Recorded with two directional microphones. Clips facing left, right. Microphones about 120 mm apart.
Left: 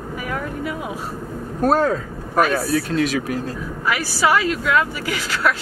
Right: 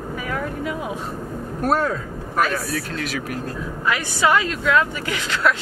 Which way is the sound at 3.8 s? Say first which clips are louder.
Even; 5° left (ahead or behind).